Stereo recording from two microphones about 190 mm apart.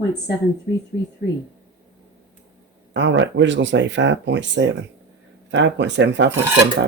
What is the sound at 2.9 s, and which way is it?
Speech, 75° right (ahead or behind).